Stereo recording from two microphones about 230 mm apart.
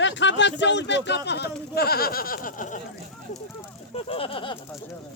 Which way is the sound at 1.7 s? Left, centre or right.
Left.